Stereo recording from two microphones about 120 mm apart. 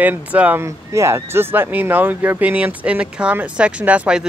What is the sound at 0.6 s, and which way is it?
Speech, 25° right (ahead or behind).